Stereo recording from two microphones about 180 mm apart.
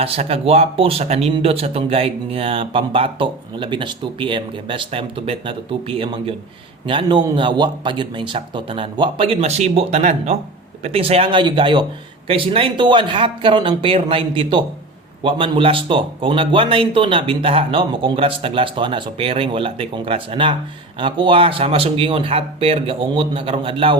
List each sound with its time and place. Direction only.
0.0 s speech: 35° right (ahead or behind)